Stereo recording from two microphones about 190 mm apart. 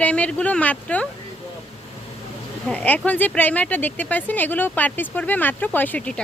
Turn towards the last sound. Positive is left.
turn(degrees=5)  # may be behind; listen again after turning